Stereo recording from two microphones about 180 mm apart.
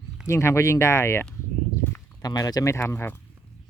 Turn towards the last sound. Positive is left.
turn(degrees=10)  # may be behind; listen again after turning